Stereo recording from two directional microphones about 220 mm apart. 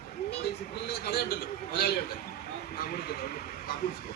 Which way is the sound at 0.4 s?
45° left (ahead or behind).